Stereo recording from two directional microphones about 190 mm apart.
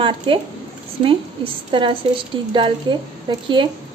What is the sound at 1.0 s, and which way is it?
A woman's voice, 25° right (ahead or behind).